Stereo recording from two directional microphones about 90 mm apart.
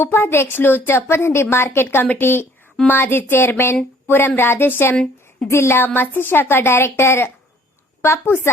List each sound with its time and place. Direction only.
0.0 s a woman's voice: 25° left (ahead or behind)